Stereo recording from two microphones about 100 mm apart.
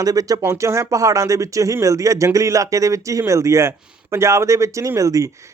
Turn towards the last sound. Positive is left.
turn(degrees=-35)  # may be behind; listen again after turning